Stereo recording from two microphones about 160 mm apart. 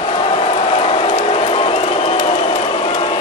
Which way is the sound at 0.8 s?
40° left (ahead or behind).